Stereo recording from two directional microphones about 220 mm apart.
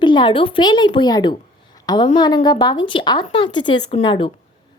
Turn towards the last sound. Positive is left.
turn(degrees=25)  # may be behind; listen again after turning